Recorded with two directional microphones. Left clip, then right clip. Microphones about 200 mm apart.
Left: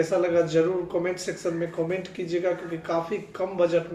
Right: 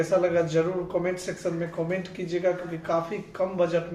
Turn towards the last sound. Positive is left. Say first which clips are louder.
# left 1 dB
turn(degrees=5)  # may be behind; listen again after turning